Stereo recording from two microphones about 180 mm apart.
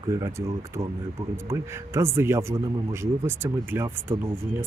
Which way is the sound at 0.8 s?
25° right (ahead or behind).